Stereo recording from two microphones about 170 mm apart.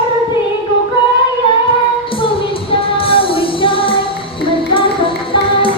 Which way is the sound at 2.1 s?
30° left (ahead or behind).